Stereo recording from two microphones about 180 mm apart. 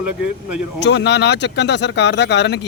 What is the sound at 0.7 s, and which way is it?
Speech, 75° left (ahead or behind).